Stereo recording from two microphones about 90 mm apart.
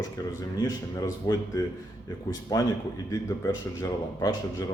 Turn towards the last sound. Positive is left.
turn(degrees=40)  # may be behind; listen again after turning